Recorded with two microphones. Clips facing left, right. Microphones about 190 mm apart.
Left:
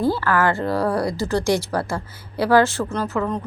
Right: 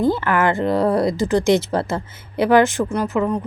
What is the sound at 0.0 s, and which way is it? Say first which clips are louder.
A woman's voice: right 2 dB; 20° right (ahead or behind).